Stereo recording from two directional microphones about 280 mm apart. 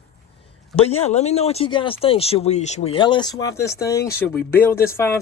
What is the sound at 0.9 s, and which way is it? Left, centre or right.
Speech, left.